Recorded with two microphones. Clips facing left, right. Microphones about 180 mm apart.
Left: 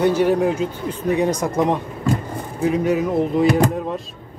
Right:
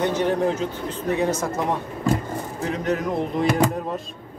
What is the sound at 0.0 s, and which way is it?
Speech, 10° left (ahead or behind).